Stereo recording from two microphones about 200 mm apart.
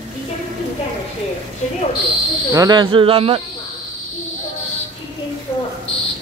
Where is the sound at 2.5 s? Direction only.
20° right (ahead or behind).